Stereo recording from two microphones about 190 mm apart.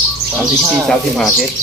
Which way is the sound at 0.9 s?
Centre (ahead or behind).